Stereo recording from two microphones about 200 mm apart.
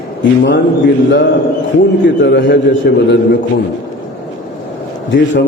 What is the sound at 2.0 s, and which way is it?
A man's voice, 60° left (ahead or behind).